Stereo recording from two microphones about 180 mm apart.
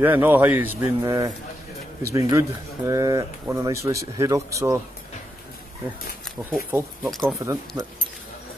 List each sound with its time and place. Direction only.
0.0 s a man's voice: 10° right (ahead or behind)
6.7 s speech: centre (ahead or behind)
7.3 s speech: 15° right (ahead or behind)